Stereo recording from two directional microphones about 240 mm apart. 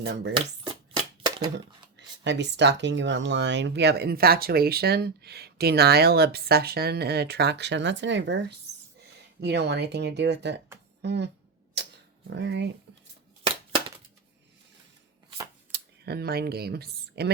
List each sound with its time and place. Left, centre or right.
0.0 s speech: right
2.0 s speech: right
12.3 s speech: right
15.7 s speech: right